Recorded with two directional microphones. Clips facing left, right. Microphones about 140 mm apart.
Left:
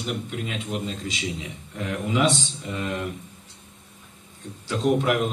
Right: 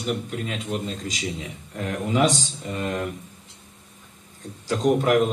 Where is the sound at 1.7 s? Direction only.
40° right (ahead or behind).